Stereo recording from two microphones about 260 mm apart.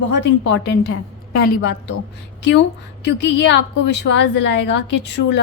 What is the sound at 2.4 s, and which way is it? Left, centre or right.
A woman's voice, left.